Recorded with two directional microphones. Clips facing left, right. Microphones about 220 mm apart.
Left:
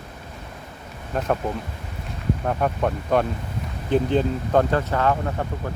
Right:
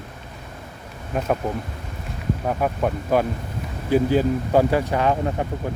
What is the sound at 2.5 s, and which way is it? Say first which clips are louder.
Speech: right 1 dB; 5° right (ahead or behind).